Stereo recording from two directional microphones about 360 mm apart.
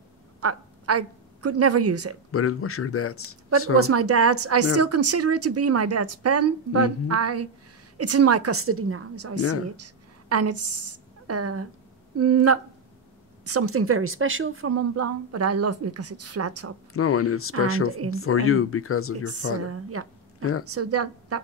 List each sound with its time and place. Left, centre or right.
0.4 s a woman's voice: right
2.3 s speech: left
3.7 s speech: right
9.4 s speech: left
9.8 s a woman's voice: right
16.9 s speech: left
19.7 s a woman's voice: right